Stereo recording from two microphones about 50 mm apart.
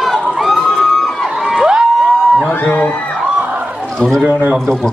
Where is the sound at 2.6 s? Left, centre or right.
Left.